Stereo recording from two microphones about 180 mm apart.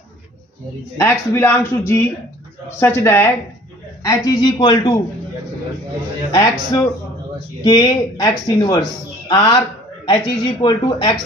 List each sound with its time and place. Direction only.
0.9 s a man's voice: 15° left (ahead or behind)
6.3 s a man's voice: 20° left (ahead or behind)